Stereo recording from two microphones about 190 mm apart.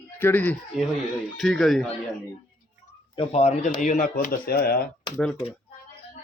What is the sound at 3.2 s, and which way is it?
Speech, 35° left (ahead or behind).